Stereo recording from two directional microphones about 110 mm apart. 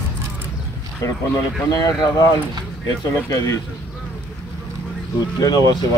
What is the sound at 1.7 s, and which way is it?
Speech, 40° left (ahead or behind).